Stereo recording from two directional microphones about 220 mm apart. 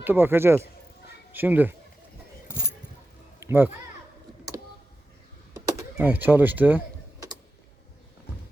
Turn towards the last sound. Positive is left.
turn(degrees=-10)  # may be behind; listen again after turning